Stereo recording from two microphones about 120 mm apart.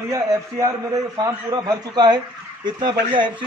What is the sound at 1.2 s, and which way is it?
A man's voice, 35° right (ahead or behind).